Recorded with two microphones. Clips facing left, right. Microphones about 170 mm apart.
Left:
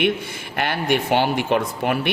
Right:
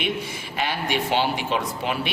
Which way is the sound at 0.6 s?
55° left (ahead or behind).